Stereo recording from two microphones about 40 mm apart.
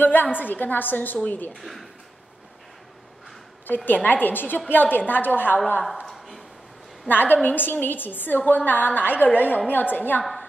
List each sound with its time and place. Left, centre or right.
0.0 s a woman's voice: left
1.6 s speech: centre
3.6 s a woman's voice: left
6.1 s a sound: centre
7.1 s a woman's voice: left